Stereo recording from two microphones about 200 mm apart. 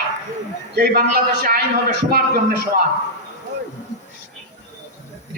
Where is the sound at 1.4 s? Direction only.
50° right (ahead or behind).